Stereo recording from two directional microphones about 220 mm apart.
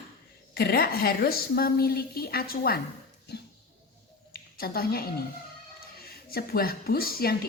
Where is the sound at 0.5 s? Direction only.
45° left (ahead or behind).